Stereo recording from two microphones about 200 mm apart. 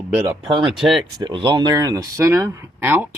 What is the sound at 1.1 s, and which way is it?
Speech, 25° right (ahead or behind).